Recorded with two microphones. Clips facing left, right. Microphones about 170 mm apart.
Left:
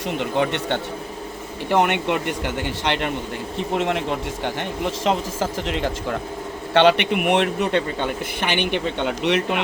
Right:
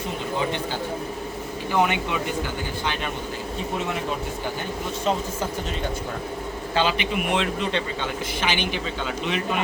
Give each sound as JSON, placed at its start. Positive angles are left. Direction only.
{"t": 0.2, "sound": "speech", "side_deg": 70}
{"t": 5.0, "sound": "speech", "side_deg": 90}
{"t": 6.7, "sound": "speech", "side_deg": 70}